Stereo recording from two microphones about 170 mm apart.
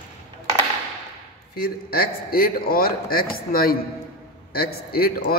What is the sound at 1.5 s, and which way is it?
A man's voice, 65° left (ahead or behind).